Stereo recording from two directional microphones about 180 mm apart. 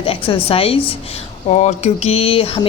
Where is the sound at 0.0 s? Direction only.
30° left (ahead or behind).